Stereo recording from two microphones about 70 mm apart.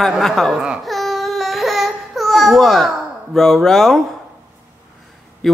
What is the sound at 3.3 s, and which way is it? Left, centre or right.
Speech, centre.